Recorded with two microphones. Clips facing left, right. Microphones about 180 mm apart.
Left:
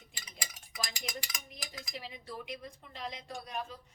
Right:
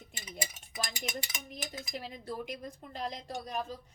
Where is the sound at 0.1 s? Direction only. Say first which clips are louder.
Right 8 dB; 25° right (ahead or behind).